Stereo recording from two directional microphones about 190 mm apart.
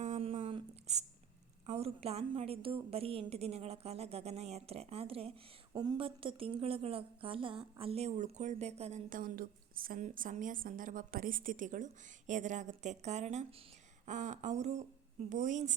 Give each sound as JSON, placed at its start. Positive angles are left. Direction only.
{"t": 0.0, "sound": "a sound", "side_deg": -35}
{"t": 1.6, "sound": "a woman's voice", "side_deg": -35}
{"t": 5.7, "sound": "a woman's voice", "side_deg": -20}